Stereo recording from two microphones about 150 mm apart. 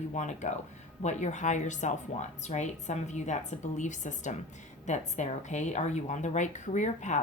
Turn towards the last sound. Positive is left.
turn(degrees=55)  # may be behind; listen again after turning